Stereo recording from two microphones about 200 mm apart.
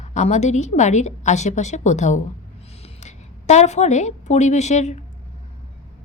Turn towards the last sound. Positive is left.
turn(degrees=35)  # may be behind; listen again after turning